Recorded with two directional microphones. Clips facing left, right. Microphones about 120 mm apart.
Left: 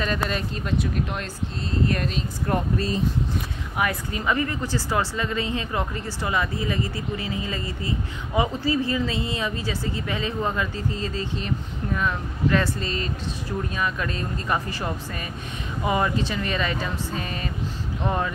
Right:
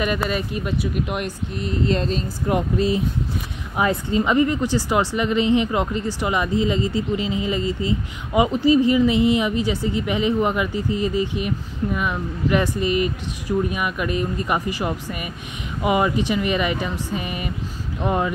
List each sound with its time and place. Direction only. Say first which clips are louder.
0.0 s a woman's voice: right 3 dB; 10° right (ahead or behind)
3.7 s a woman's voice: right 6 dB; 25° right (ahead or behind)